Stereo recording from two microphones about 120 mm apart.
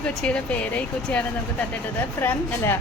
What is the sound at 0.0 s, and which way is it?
Speech, 5° left (ahead or behind).